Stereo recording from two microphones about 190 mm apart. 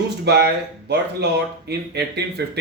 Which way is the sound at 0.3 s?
60° right (ahead or behind).